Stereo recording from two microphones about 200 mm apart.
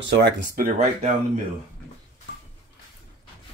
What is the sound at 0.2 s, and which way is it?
Speech, 45° right (ahead or behind).